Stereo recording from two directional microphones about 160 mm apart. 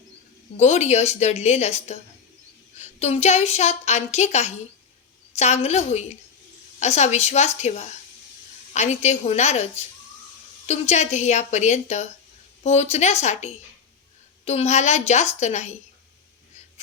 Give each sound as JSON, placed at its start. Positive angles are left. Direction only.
{"t": 0.5, "sound": "a woman's voice", "side_deg": 45}